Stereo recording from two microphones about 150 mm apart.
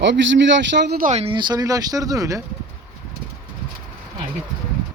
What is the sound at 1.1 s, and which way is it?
Speech, 45° right (ahead or behind).